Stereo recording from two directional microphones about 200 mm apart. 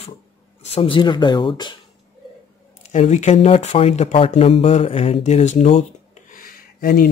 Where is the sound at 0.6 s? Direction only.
30° left (ahead or behind).